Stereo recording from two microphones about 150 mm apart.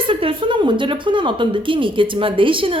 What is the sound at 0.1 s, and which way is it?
Speech, 35° right (ahead or behind).